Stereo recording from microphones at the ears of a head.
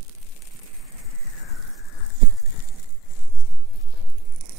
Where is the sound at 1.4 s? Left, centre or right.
Left.